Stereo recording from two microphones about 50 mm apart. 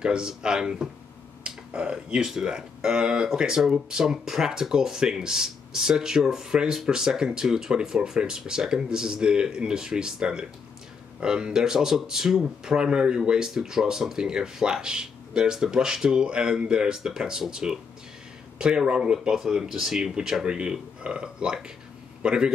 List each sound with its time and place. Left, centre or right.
0.0 s speech: centre
1.4 s a sound: right
2.2 s a man's voice: centre